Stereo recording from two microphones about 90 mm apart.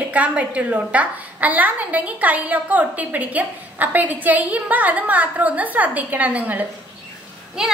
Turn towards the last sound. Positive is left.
turn(degrees=-5)  # may be behind; listen again after turning